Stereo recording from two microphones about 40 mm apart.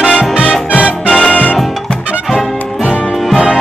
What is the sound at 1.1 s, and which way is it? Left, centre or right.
Music, left.